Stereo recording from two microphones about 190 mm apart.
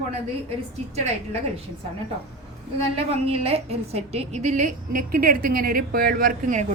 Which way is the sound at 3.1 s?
30° right (ahead or behind).